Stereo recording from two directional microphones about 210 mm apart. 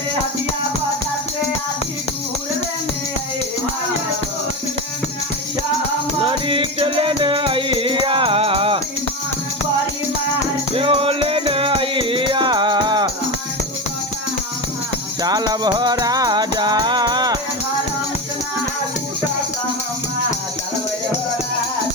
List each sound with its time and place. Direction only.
6.1 s music: 25° right (ahead or behind)
10.8 s music: 25° right (ahead or behind)
15.2 s music: 20° right (ahead or behind)